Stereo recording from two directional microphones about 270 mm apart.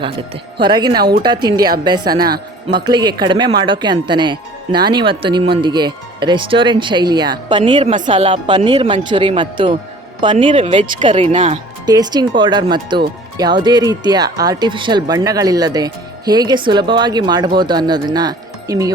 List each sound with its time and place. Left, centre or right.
0.0 s speech: centre